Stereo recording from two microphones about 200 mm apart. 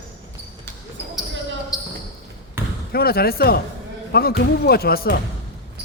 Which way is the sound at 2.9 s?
50° left (ahead or behind).